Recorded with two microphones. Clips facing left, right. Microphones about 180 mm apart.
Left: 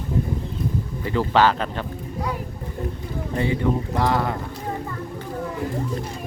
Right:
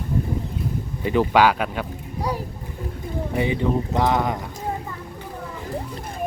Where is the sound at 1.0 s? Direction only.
15° right (ahead or behind).